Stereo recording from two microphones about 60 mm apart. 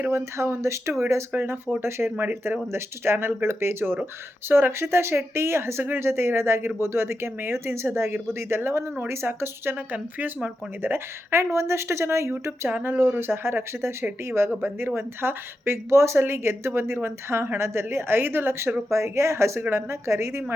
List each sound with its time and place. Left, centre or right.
0.1 s speech: right
1.3 s speech: right
12.3 s speech: right